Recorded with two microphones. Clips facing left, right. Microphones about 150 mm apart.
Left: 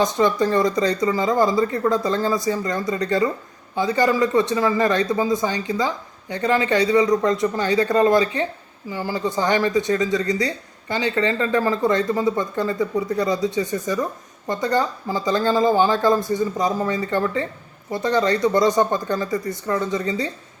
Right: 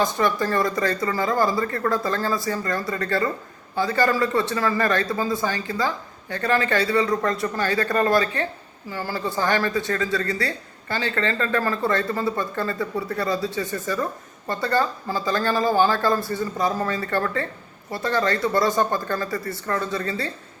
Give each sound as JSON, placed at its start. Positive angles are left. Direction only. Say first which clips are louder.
{"t": 0.0, "sound": "speech", "louder": "left 3 dB", "side_deg": 20}